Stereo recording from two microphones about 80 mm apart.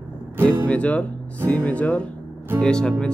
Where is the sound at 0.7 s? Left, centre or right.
Centre.